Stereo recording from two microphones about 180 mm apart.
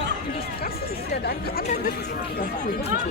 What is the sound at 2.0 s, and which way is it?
Speech, 50° left (ahead or behind).